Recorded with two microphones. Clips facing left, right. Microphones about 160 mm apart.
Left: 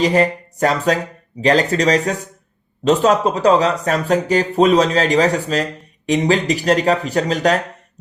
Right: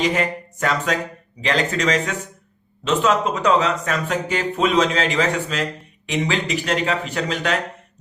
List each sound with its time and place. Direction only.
0.0 s speech: 35° left (ahead or behind)